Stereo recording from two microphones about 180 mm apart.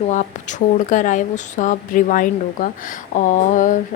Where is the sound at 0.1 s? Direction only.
45° left (ahead or behind).